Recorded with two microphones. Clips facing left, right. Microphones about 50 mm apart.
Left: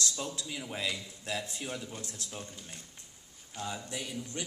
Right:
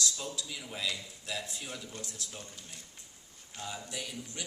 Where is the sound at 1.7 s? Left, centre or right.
Centre.